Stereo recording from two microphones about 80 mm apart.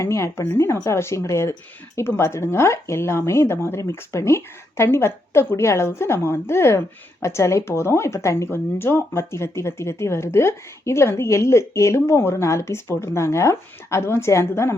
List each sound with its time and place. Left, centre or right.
0.0 s speech: left